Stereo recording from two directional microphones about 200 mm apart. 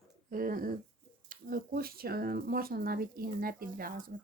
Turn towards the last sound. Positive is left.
turn(degrees=-45)  # may be behind; listen again after turning